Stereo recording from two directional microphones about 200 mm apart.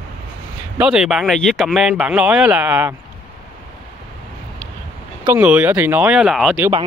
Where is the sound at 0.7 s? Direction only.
5° right (ahead or behind).